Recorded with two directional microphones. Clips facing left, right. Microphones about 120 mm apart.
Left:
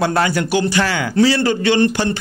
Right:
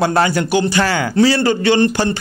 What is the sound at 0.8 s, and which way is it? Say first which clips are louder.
Speech: right 1 dB; 40° right (ahead or behind).